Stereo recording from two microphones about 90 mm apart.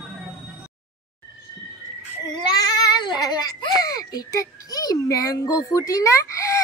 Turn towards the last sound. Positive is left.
turn(degrees=35)  # may be behind; listen again after turning